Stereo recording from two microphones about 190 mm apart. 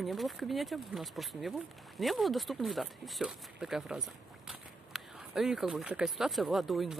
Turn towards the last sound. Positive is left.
turn(degrees=0)  # may be behind; listen again after turning